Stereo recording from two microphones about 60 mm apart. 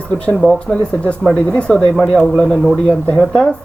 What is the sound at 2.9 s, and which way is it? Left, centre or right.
Speech, centre.